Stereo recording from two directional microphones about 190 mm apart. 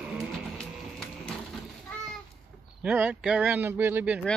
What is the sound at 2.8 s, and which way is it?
Speech, 5° right (ahead or behind).